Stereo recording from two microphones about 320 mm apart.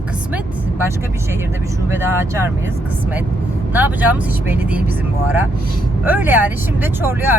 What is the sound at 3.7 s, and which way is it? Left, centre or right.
Speech, centre.